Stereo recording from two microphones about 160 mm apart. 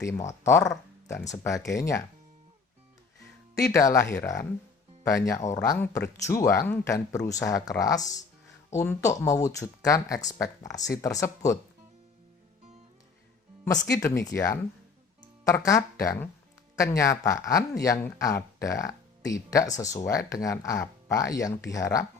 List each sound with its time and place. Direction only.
0.4 s speech: 15° left (ahead or behind)
3.5 s speech: 20° left (ahead or behind)
13.9 s speech: 20° left (ahead or behind)